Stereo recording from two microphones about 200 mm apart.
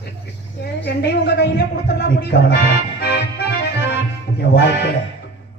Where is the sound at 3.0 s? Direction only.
55° left (ahead or behind).